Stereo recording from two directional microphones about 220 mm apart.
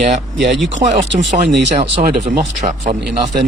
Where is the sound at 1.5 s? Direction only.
55° right (ahead or behind).